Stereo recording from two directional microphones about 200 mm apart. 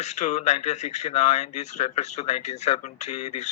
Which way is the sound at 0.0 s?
35° left (ahead or behind).